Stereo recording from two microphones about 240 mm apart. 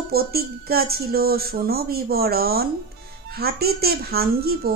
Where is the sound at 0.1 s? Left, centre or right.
Right.